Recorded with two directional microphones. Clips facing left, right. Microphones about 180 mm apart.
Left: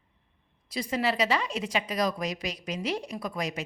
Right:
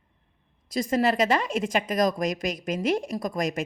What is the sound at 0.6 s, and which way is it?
Speech, 45° right (ahead or behind).